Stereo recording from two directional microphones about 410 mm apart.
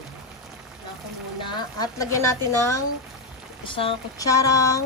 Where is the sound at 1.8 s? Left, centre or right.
Centre.